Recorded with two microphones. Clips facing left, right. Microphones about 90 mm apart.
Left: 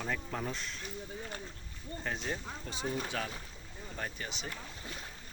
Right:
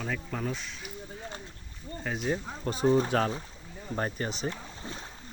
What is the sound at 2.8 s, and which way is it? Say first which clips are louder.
Speech: right 13 dB; 35° right (ahead or behind).